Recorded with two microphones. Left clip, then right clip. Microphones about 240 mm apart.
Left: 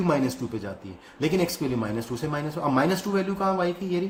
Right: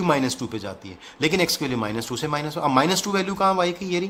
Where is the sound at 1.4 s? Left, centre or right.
Right.